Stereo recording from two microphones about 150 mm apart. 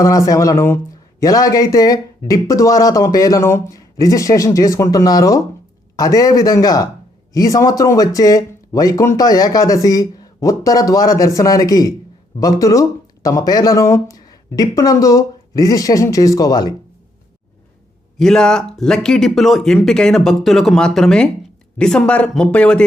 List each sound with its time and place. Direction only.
0.0 s speech: 25° left (ahead or behind)
18.2 s speech: 5° left (ahead or behind)